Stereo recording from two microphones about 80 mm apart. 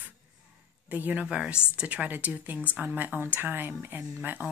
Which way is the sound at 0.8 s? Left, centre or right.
Right.